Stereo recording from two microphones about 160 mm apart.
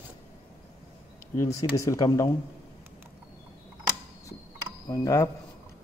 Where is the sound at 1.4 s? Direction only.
20° left (ahead or behind).